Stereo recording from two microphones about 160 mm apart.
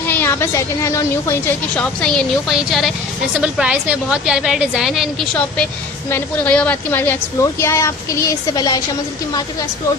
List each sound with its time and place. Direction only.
0.1 s a woman's voice: 15° left (ahead or behind); by 5.0 s centre (ahead or behind)
6.1 s a woman's voice: 10° left (ahead or behind)